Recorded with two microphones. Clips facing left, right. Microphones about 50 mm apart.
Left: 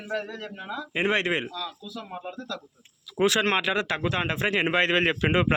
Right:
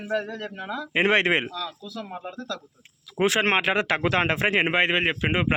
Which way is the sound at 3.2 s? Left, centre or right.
Right.